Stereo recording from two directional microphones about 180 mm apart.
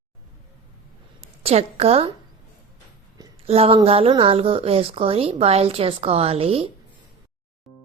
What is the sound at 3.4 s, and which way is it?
A woman's voice, 35° right (ahead or behind).